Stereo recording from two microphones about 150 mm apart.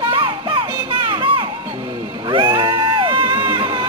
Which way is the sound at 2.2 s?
30° right (ahead or behind).